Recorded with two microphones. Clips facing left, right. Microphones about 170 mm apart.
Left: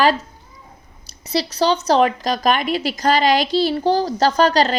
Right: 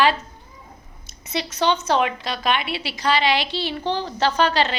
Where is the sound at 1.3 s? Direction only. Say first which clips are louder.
Left 4 dB; 35° left (ahead or behind).